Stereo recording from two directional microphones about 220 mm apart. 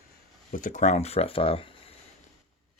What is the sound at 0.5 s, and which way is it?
Speech, 35° left (ahead or behind).